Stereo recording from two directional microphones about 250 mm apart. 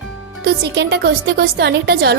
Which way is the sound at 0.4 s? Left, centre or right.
Right.